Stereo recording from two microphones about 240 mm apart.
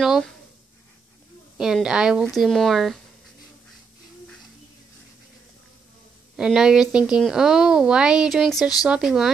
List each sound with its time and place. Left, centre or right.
0.0 s speech: centre
1.6 s speech: centre
6.3 s speech: centre